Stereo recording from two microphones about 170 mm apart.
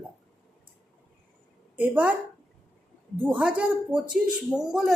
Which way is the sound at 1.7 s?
10° right (ahead or behind).